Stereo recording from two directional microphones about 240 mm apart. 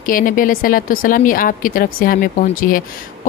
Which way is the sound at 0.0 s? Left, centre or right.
Left.